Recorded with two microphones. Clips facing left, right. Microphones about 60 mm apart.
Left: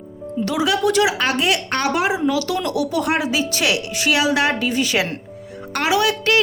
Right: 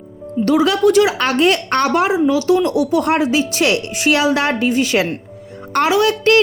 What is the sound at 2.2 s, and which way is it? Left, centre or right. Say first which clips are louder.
Speech: right 6 dB; right.